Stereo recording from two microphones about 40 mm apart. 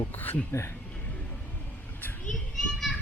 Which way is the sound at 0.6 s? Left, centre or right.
Left.